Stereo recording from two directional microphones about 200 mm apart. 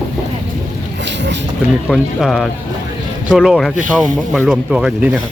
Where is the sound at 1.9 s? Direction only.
Centre (ahead or behind).